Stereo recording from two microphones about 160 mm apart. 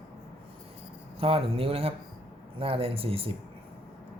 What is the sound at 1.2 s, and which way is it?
Speech, 35° right (ahead or behind).